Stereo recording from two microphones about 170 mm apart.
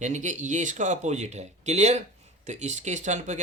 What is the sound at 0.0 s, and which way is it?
Speech, 45° right (ahead or behind).